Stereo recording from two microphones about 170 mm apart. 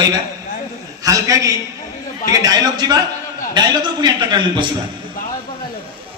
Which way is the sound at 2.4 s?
25° right (ahead or behind).